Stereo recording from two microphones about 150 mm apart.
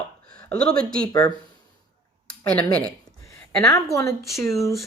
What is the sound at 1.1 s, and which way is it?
Speech, 25° left (ahead or behind).